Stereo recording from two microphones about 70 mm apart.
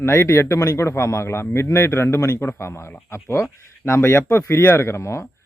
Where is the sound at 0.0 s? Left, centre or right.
Left.